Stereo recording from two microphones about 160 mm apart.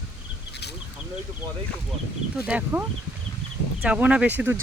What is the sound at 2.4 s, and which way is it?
Speech, 10° right (ahead or behind).